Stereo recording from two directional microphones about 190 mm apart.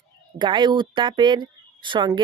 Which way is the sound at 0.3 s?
25° right (ahead or behind).